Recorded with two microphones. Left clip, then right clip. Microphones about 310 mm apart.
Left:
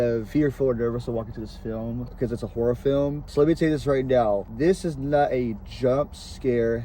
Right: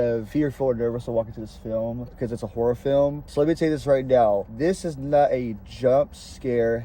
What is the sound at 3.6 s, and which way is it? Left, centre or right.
Speech, right.